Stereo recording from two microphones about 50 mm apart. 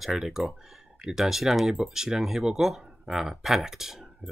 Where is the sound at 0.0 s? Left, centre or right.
Centre.